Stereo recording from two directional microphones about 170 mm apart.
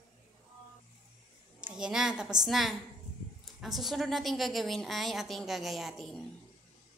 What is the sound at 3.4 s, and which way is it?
A woman's voice, centre (ahead or behind).